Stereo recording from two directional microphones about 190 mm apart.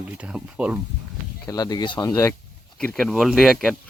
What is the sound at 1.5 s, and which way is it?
Speech, 20° left (ahead or behind).